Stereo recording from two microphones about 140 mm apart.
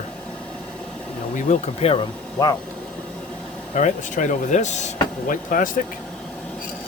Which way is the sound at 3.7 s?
65° left (ahead or behind).